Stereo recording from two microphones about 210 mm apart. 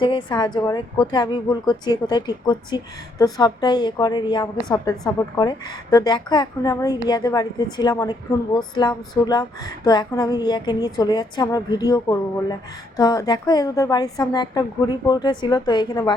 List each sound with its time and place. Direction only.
0.0 s a woman's voice: 20° left (ahead or behind)